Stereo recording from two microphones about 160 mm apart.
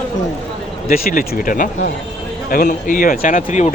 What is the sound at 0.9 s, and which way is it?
Speech, 65° left (ahead or behind).